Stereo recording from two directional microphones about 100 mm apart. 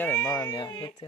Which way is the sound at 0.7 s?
40° left (ahead or behind).